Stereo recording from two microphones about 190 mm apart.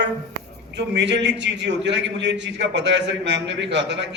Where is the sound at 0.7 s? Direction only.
65° right (ahead or behind).